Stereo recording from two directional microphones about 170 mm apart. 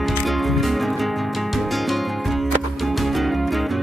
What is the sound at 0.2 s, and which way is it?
Music, centre (ahead or behind).